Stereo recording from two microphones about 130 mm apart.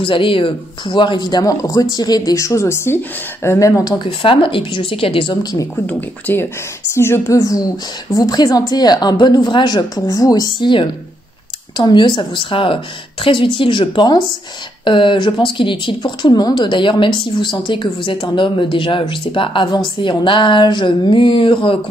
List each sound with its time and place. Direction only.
0.0 s a woman's voice: 40° left (ahead or behind)
5.9 s a woman's voice: 15° left (ahead or behind); by 21.7 s 40° left (ahead or behind)